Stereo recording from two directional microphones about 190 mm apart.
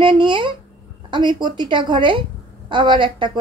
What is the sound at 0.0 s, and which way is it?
A woman's voice, 25° right (ahead or behind).